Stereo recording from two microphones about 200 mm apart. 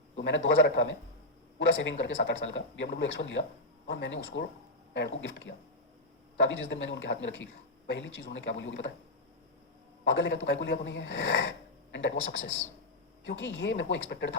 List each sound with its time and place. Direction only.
0.2 s speech: 65° left (ahead or behind)
10.0 s speech: 65° left (ahead or behind)